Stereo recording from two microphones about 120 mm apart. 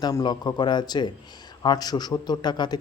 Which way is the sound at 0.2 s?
35° left (ahead or behind).